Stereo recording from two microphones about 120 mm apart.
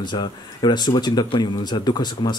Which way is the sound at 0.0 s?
40° left (ahead or behind).